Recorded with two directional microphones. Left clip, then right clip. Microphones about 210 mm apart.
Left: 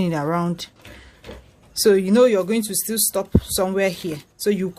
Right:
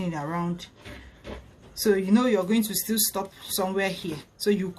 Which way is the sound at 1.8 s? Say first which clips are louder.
Left 8 dB; 50° left (ahead or behind).